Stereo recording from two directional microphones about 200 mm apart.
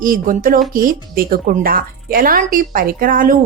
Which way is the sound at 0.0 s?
45° right (ahead or behind).